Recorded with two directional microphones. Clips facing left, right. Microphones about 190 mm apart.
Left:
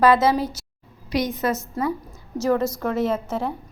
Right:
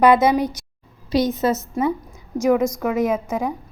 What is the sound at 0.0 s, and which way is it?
A woman's voice, 15° right (ahead or behind).